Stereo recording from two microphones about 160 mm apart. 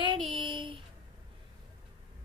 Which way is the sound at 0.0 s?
30° right (ahead or behind).